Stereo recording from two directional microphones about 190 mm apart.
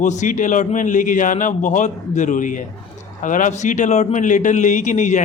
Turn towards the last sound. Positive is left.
turn(degrees=40)  # may be behind; listen again after turning